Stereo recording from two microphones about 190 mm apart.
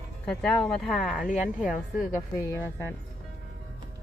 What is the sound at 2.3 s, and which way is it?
Speech, 15° left (ahead or behind).